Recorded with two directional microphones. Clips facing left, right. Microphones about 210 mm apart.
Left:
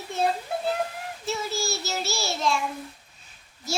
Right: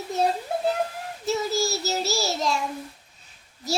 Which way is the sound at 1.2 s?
40° right (ahead or behind).